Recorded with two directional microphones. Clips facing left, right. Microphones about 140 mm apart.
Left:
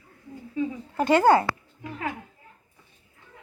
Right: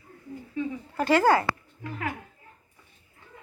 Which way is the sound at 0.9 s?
20° left (ahead or behind).